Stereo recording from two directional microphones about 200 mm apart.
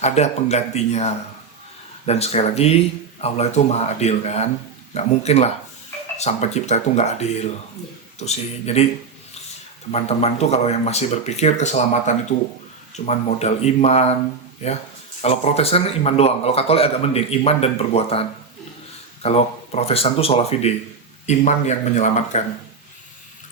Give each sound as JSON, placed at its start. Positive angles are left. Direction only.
{"t": 0.0, "sound": "a man's voice", "side_deg": 35}
{"t": 9.9, "sound": "a man's voice", "side_deg": 30}
{"t": 19.2, "sound": "a man's voice", "side_deg": 30}